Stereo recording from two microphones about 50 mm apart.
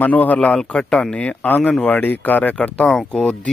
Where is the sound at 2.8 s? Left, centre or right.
Centre.